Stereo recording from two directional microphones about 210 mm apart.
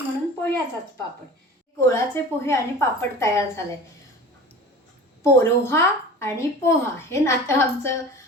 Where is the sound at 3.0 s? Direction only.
15° left (ahead or behind).